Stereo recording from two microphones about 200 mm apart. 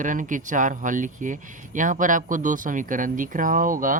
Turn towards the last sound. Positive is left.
turn(degrees=-40)  # may be behind; listen again after turning